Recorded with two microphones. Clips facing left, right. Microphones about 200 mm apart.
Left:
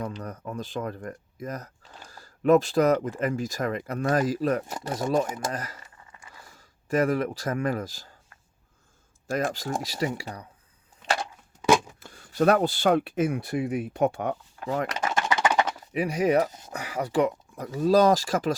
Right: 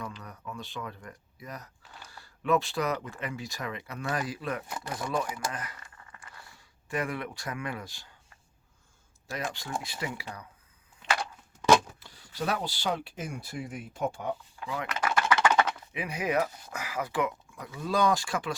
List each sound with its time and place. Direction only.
0.2 s speech: 40° left (ahead or behind)
9.2 s speech: 45° left (ahead or behind)
12.0 s speech: 50° left (ahead or behind)
14.6 s speech: 45° left (ahead or behind)
15.0 s a sound: 20° left (ahead or behind)
15.6 s speech: 35° left (ahead or behind)
16.5 s speech: 20° left (ahead or behind)
16.7 s speech: 35° left (ahead or behind)